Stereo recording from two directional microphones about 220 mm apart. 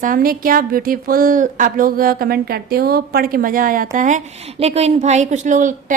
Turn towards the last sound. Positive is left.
turn(degrees=-35)  # may be behind; listen again after turning